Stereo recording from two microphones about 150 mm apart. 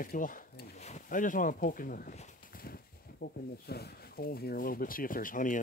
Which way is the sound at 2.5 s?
85° left.